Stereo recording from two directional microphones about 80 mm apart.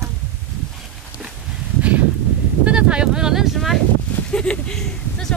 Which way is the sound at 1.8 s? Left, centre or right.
Centre.